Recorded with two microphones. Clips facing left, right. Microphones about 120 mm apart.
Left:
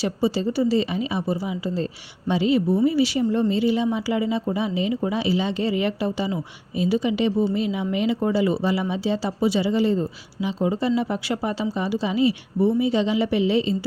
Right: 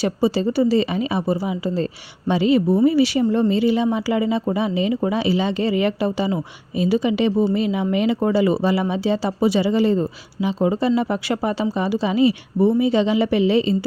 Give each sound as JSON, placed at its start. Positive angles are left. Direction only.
{"t": 0.0, "sound": "a woman's voice", "side_deg": -60}